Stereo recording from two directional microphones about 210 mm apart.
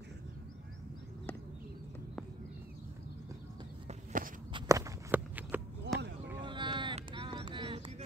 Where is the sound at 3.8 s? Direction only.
40° right (ahead or behind).